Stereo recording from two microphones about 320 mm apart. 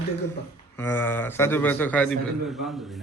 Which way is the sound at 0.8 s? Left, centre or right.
Centre.